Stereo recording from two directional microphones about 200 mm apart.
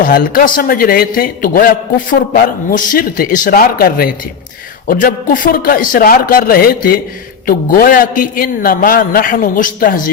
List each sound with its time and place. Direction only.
0.0 s a man's voice: 45° left (ahead or behind)